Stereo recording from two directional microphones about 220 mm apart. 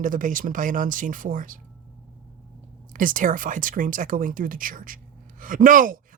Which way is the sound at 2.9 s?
35° right (ahead or behind).